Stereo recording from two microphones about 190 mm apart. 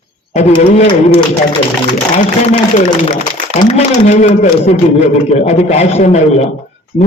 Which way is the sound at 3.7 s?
35° left (ahead or behind).